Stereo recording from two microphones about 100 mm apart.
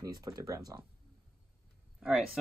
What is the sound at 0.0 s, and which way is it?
Speech, 35° right (ahead or behind).